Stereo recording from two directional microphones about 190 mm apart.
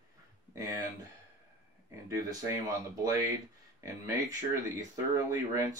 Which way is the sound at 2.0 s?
15° right (ahead or behind).